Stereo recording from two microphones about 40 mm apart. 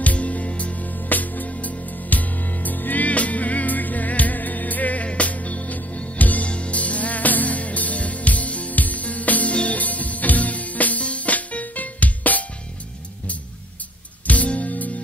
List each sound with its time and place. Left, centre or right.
0.0 s music: left
14.2 s music: left